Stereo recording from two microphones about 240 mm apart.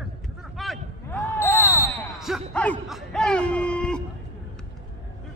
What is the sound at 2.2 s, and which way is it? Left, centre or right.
Basketball bounce, centre.